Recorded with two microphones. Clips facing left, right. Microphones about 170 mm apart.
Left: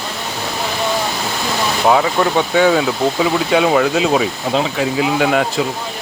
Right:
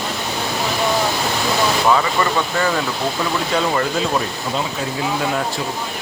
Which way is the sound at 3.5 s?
80° left.